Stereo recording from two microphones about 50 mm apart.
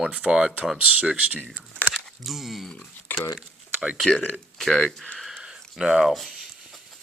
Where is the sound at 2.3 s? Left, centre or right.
Centre.